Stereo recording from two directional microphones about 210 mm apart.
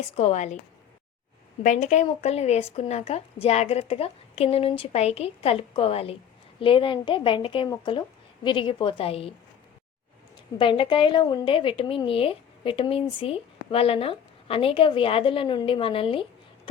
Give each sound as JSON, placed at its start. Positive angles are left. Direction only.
{"t": 0.2, "sound": "a woman's voice", "side_deg": 30}
{"t": 1.6, "sound": "speech", "side_deg": 35}
{"t": 10.6, "sound": "speech", "side_deg": 25}